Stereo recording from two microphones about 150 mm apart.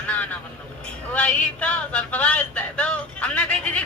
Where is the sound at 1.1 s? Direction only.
10° left (ahead or behind).